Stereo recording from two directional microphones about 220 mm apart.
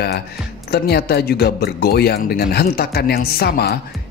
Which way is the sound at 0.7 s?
45° left (ahead or behind).